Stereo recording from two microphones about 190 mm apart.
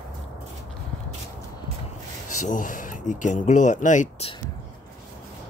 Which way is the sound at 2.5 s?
40° left (ahead or behind).